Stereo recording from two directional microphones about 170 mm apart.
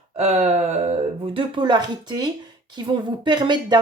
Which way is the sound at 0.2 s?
40° right (ahead or behind).